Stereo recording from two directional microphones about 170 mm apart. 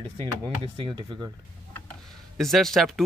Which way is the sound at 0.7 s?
30° right (ahead or behind).